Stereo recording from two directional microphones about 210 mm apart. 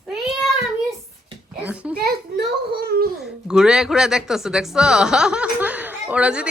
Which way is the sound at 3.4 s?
5° right (ahead or behind).